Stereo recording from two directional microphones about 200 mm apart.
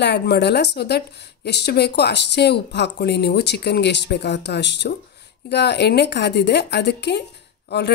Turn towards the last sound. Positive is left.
turn(degrees=55)  # may be behind; listen again after turning